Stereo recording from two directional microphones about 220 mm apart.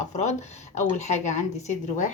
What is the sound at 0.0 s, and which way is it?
A woman's voice, 30° left (ahead or behind).